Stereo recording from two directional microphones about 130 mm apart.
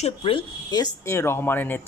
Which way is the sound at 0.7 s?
25° left (ahead or behind).